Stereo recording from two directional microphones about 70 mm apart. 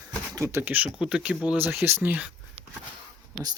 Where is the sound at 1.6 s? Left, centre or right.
Right.